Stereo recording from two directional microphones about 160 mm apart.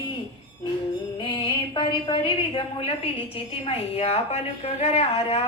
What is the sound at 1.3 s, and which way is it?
A woman's voice, 30° left (ahead or behind).